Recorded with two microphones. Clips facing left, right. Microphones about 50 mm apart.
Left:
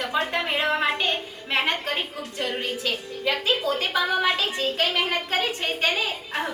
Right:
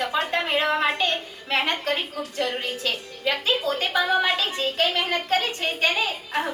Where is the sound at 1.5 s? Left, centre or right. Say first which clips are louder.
Even; centre.